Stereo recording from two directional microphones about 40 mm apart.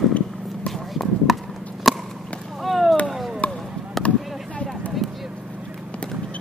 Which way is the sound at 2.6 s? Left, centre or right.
Centre.